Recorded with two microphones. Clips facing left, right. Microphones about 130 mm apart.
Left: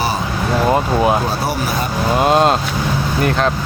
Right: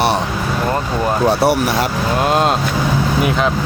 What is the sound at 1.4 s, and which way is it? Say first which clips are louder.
Speech: right 5 dB; 70° right (ahead or behind).